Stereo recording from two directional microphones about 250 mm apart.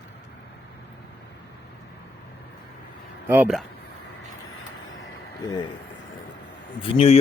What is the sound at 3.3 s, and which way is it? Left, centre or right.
Speech, centre.